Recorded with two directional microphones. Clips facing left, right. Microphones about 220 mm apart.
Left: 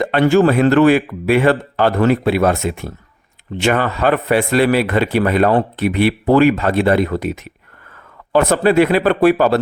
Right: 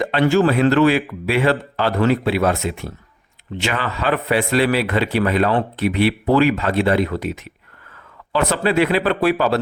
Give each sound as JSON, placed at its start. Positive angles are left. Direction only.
{"t": 0.0, "sound": "speech", "side_deg": 50}